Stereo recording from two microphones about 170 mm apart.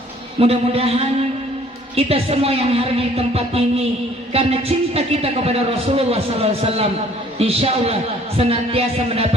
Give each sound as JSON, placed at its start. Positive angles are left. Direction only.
{"t": 0.3, "sound": "a man's voice", "side_deg": -35}